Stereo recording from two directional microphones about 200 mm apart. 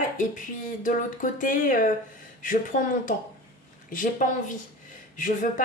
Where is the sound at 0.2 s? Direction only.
40° left (ahead or behind).